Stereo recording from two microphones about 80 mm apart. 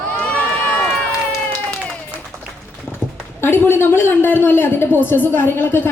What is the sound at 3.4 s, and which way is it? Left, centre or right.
A woman's voice, left.